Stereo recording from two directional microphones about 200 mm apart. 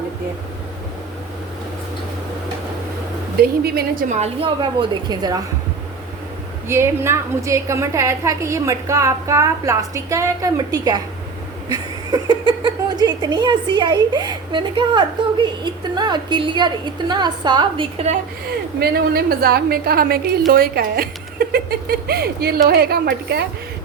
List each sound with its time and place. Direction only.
3.6 s speech: 50° right (ahead or behind)
4.1 s a woman's voice: 30° right (ahead or behind)
6.7 s a woman's voice: 15° right (ahead or behind); by 18.2 s 30° right (ahead or behind)
18.8 s speech: 50° right (ahead or behind)